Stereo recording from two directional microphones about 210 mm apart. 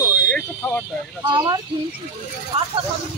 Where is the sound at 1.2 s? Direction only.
20° right (ahead or behind).